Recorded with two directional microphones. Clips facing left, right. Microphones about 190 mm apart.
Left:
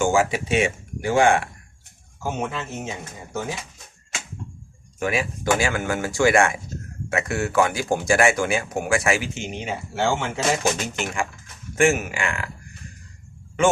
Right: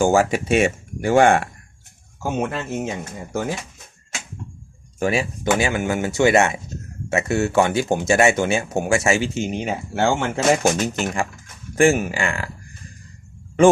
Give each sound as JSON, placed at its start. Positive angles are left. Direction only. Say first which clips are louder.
{"t": 0.0, "sound": "speech", "louder": "right 3 dB", "side_deg": -45}
{"t": 2.4, "sound": "speech", "louder": "right 4 dB", "side_deg": -55}
{"t": 4.9, "sound": "speech", "louder": "right 3 dB", "side_deg": -30}
{"t": 9.3, "sound": "speech", "louder": "right 6 dB", "side_deg": -50}